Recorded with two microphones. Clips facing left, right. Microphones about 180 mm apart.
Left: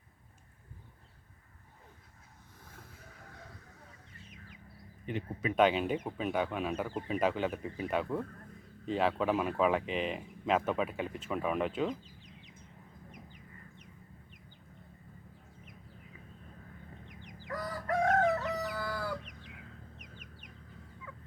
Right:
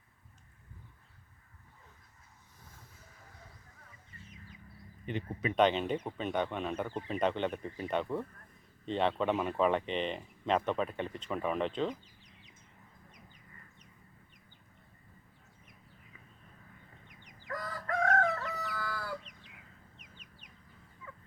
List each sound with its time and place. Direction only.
2.7 s vehicle: 65° left (ahead or behind)
5.0 s speech: 5° left (ahead or behind)
17.5 s chicken: 15° left (ahead or behind)